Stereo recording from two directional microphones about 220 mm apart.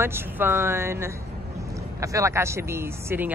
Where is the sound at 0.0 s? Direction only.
10° right (ahead or behind).